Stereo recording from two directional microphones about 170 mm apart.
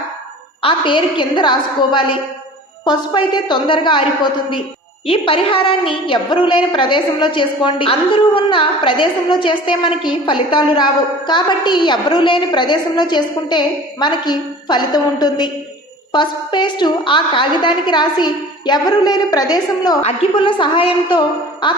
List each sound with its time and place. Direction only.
0.6 s a woman's voice: 30° left (ahead or behind)
20.0 s a woman's voice: 35° left (ahead or behind)